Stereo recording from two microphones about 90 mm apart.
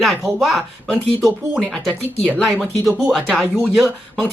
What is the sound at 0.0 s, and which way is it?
Speech, centre (ahead or behind).